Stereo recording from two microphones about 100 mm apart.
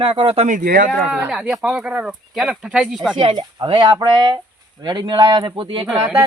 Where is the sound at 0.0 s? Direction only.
65° right (ahead or behind).